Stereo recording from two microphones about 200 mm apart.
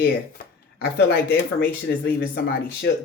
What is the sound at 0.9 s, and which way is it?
Speech, 55° left (ahead or behind).